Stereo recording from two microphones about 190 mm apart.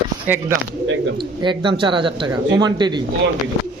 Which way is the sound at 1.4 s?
25° right (ahead or behind).